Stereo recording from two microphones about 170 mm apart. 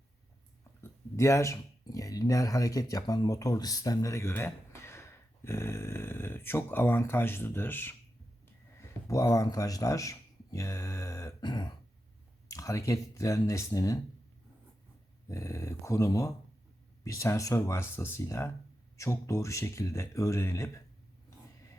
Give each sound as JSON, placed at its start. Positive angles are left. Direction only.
{"t": 0.8, "sound": "speech", "side_deg": 15}
{"t": 9.0, "sound": "speech", "side_deg": 20}
{"t": 15.3, "sound": "speech", "side_deg": 15}